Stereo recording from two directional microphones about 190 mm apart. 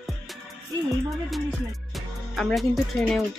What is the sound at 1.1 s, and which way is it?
Speech, centre (ahead or behind).